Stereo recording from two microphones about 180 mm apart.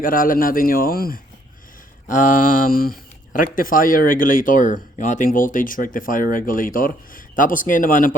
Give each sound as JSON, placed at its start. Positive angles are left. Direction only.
{"t": 0.0, "sound": "speech", "side_deg": 50}